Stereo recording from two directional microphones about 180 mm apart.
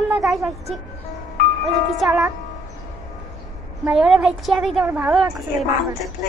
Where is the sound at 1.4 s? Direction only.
60° left (ahead or behind).